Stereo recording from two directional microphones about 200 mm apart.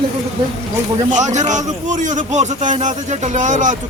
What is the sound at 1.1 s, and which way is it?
A man's voice, 35° right (ahead or behind).